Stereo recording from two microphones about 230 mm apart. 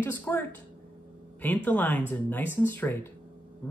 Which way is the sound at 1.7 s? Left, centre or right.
Centre.